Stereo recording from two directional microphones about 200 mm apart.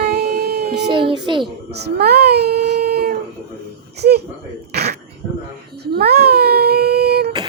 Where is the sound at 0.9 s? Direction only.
25° right (ahead or behind).